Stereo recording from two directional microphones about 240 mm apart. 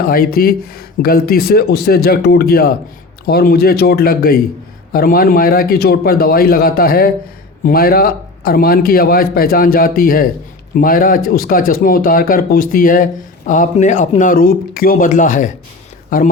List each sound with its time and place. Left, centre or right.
0.0 s speech: left